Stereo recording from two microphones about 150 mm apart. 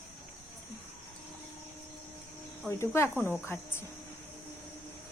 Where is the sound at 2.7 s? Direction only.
20° left (ahead or behind).